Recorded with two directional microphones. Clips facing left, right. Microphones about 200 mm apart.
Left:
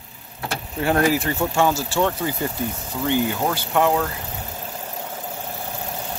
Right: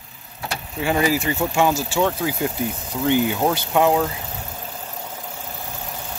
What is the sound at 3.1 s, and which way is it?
Speech, 15° right (ahead or behind).